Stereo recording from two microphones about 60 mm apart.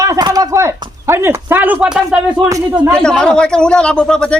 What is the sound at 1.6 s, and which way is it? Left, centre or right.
Speech, right.